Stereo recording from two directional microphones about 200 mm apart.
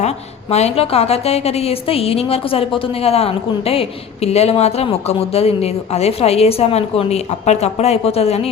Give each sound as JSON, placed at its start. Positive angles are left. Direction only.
{"t": 0.5, "sound": "a woman's voice", "side_deg": 30}